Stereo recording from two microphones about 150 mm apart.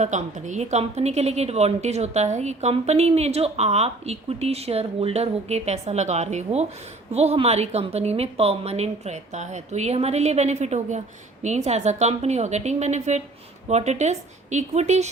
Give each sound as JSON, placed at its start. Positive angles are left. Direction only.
{"t": 0.0, "sound": "a woman's voice", "side_deg": -50}